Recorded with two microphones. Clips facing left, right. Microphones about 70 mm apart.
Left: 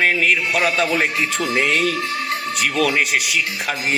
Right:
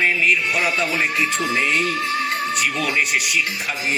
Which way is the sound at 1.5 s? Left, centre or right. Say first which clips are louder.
Left 3 dB; left.